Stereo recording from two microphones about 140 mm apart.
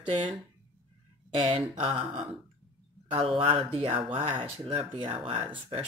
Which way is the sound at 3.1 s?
40° right (ahead or behind).